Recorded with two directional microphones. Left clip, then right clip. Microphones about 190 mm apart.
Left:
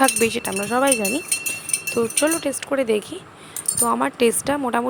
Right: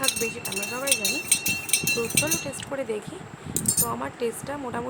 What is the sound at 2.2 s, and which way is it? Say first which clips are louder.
Speech: left 7 dB; 35° left (ahead or behind).